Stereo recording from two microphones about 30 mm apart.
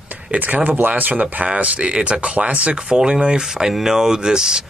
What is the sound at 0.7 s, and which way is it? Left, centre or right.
Speech, right.